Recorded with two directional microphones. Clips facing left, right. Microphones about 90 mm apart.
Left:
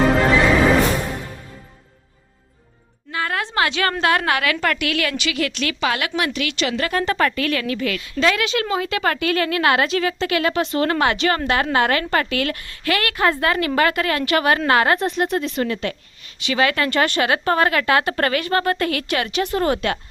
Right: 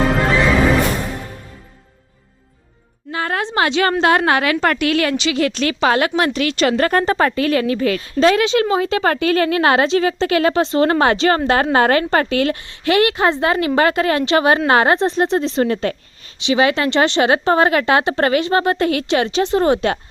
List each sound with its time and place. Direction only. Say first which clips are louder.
3.1 s a sound: right 3 dB; 30° right (ahead or behind)
4.0 s a woman's voice: right 2 dB; 30° right (ahead or behind)
7.1 s speech: right 4 dB; 30° right (ahead or behind)
16.4 s speech: right 4 dB; 20° right (ahead or behind)